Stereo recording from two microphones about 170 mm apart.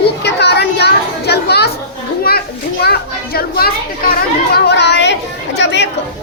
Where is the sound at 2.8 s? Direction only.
65° left (ahead or behind).